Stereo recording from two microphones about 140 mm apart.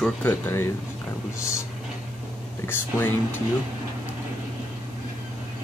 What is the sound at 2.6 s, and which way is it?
Speech, 15° left (ahead or behind).